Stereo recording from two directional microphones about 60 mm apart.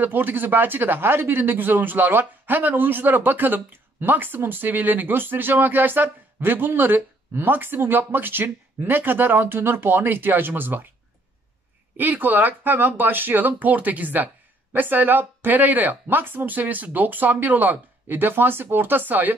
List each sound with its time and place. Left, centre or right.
0.0 s speech: right
12.0 s speech: right